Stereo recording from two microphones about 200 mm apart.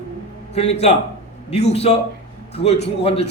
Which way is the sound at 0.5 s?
35° left (ahead or behind).